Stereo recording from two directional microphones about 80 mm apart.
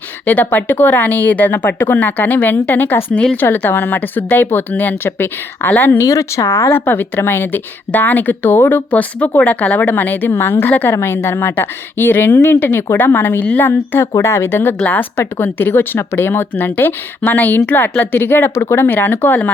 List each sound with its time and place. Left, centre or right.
0.3 s speech: left
6.0 s speech: left